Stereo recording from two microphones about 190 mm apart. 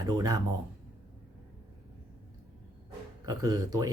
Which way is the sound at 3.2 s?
20° right (ahead or behind).